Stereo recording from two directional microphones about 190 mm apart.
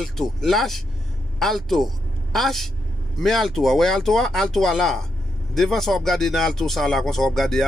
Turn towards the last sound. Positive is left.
turn(degrees=0)  # may be behind; listen again after turning